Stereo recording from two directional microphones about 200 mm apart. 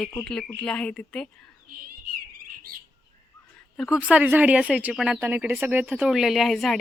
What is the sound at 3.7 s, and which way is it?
Speech, centre (ahead or behind).